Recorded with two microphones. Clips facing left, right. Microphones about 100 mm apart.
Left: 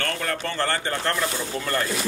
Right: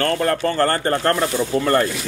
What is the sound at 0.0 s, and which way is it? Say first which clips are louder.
A man's voice: right 9 dB; 40° right (ahead or behind).